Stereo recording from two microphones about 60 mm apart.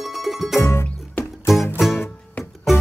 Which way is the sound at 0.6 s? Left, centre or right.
Left.